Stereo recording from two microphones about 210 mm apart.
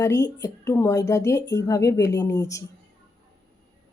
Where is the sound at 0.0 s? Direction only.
15° left (ahead or behind).